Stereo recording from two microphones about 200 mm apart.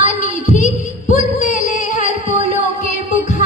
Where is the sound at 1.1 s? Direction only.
40° left (ahead or behind).